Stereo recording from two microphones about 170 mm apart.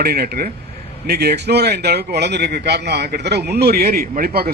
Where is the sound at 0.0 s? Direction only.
65° right (ahead or behind).